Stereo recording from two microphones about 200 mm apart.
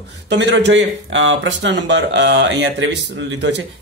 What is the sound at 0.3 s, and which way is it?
Speech, 60° right (ahead or behind).